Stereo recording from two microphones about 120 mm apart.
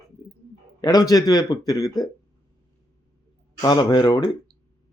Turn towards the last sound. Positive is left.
turn(degrees=30)  # may be behind; listen again after turning